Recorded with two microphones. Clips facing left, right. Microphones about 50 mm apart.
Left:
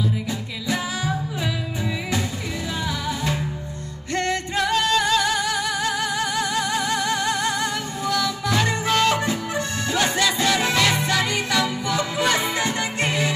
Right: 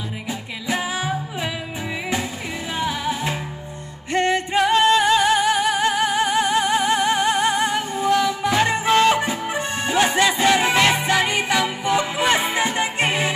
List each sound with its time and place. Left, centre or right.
0.3 s music: right
2.8 s music: right